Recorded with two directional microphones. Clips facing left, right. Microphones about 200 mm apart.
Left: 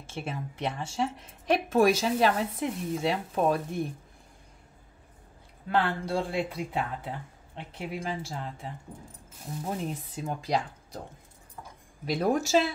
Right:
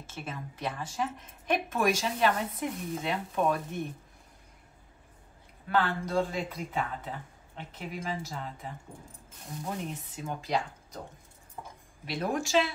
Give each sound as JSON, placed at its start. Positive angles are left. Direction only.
{"t": 0.0, "sound": "a woman's voice", "side_deg": 30}
{"t": 5.7, "sound": "speech", "side_deg": 30}
{"t": 9.7, "sound": "speech", "side_deg": 35}
{"t": 12.1, "sound": "speech", "side_deg": 40}